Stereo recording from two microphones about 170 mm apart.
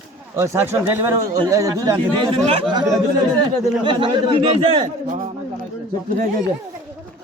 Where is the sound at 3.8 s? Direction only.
30° right (ahead or behind).